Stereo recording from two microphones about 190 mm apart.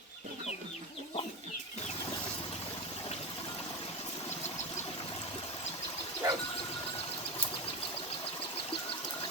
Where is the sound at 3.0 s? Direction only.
25° left (ahead or behind).